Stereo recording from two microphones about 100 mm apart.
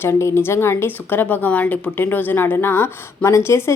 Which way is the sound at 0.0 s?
30° left (ahead or behind).